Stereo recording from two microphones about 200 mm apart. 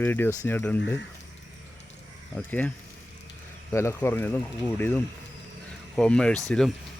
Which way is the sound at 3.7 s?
15° left (ahead or behind).